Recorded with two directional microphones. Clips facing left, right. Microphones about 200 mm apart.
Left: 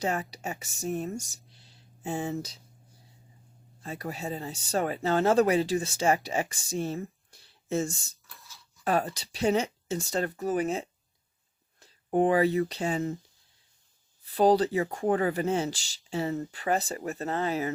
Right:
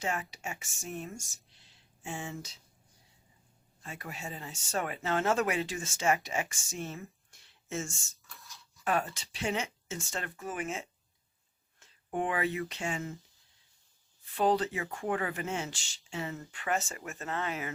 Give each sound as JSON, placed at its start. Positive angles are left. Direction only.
{"t": 0.0, "sound": "speech", "side_deg": 35}
{"t": 3.8, "sound": "speech", "side_deg": 35}
{"t": 8.2, "sound": "a sound", "side_deg": 0}
{"t": 8.8, "sound": "speech", "side_deg": 35}
{"t": 14.3, "sound": "speech", "side_deg": 35}